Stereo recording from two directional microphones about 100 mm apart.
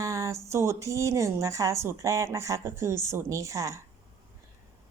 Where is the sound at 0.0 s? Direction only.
30° right (ahead or behind).